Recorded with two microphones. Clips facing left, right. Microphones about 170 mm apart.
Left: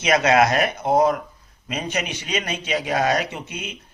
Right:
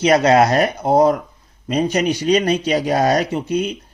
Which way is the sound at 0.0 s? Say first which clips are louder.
Right 4 dB; 35° right (ahead or behind).